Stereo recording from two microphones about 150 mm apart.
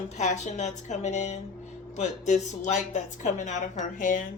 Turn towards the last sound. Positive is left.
turn(degrees=60)  # may be behind; listen again after turning